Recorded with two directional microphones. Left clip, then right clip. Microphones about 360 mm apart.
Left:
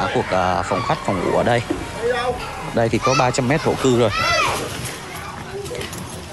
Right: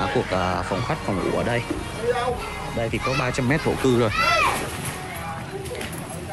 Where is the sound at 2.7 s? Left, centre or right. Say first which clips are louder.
Left 8 dB; centre.